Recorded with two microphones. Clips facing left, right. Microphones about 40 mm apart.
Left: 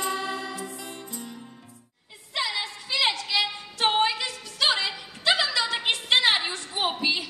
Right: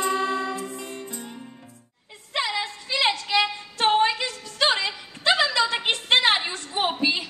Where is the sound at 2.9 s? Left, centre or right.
Right.